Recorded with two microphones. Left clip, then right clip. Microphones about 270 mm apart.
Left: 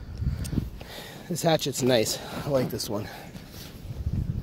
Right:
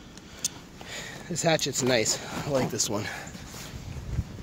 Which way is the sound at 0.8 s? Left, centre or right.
Centre.